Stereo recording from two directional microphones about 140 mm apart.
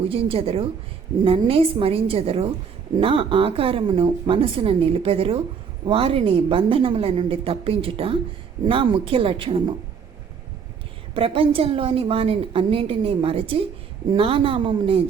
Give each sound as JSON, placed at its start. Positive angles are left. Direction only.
{"t": 0.0, "sound": "a woman's voice", "side_deg": -40}
{"t": 11.1, "sound": "a woman's voice", "side_deg": -40}